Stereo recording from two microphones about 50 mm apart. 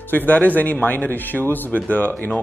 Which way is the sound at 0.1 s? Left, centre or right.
Left.